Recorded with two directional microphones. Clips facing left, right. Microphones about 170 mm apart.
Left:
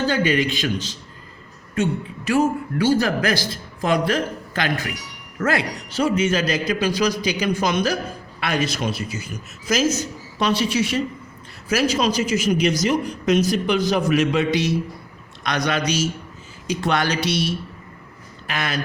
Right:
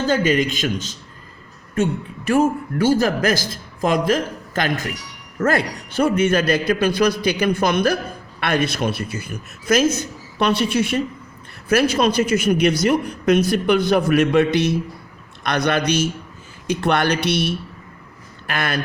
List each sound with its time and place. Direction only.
0.1 s a woman's voice: 45° right (ahead or behind)